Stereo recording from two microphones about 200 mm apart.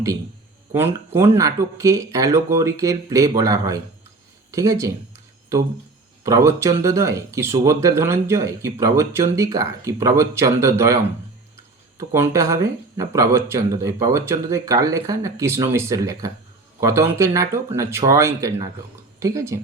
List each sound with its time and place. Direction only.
0.7 s speech: 10° right (ahead or behind)
6.2 s speech: 15° right (ahead or behind)